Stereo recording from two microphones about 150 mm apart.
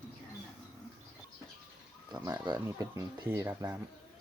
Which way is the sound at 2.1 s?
30° right (ahead or behind).